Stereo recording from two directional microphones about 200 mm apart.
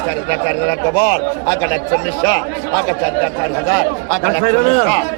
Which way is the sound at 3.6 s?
15° left (ahead or behind).